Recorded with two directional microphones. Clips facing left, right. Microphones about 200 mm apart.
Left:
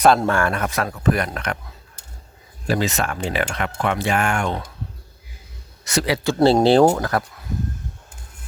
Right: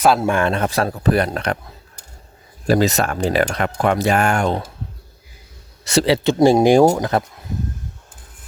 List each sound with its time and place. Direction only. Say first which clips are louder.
0.0 s a man's voice: even; 5° right (ahead or behind)
0.3 s speech: right 3 dB; 20° right (ahead or behind)
2.6 s speech: right 5 dB; 40° right (ahead or behind)
5.8 s speech: right 5 dB; 30° right (ahead or behind)
6.4 s speech: right 1 dB; 15° right (ahead or behind)